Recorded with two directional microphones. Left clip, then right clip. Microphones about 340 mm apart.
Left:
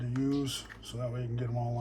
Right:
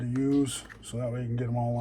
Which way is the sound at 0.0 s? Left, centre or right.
Centre.